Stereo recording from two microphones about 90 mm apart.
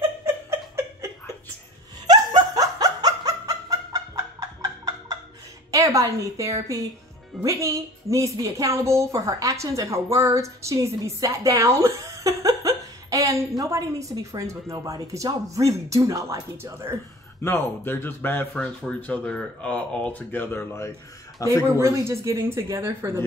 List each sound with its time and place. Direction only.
0.2 s a sound: 30° right (ahead or behind)
2.0 s a sound: 45° right (ahead or behind)
5.7 s a woman's voice: 40° right (ahead or behind)
16.7 s speech: 30° right (ahead or behind)
17.4 s speech: 25° left (ahead or behind)
21.7 s a woman's voice: 30° right (ahead or behind)